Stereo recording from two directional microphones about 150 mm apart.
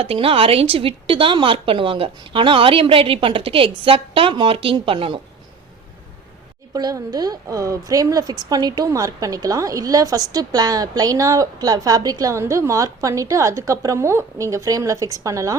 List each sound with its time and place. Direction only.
0.0 s a woman's voice: 40° right (ahead or behind)
6.7 s a woman's voice: 25° right (ahead or behind)